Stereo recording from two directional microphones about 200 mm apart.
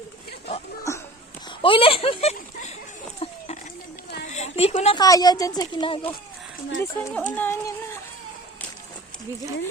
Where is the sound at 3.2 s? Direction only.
35° left (ahead or behind).